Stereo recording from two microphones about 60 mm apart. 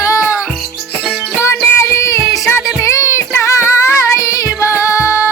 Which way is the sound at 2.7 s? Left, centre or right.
Left.